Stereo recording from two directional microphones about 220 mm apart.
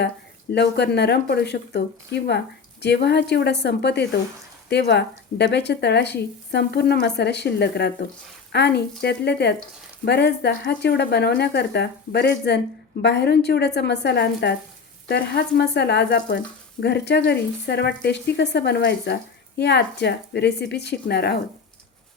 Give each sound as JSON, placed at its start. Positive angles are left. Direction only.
{"t": 0.5, "sound": "speech", "side_deg": 50}